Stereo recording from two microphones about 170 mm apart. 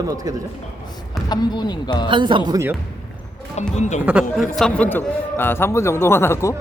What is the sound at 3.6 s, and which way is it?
Speech, 40° left (ahead or behind).